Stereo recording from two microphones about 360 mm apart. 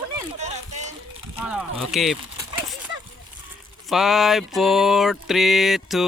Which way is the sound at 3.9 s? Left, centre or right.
Centre.